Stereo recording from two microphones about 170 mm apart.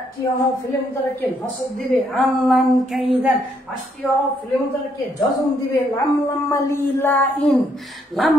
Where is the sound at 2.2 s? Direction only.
Centre (ahead or behind).